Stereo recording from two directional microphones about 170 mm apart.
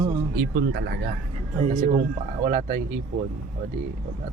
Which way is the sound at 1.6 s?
45° right (ahead or behind).